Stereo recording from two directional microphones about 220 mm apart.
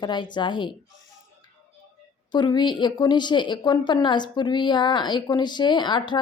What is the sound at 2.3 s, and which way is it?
A woman's voice, 20° left (ahead or behind).